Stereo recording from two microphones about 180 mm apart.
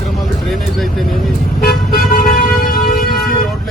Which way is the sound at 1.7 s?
55° left (ahead or behind).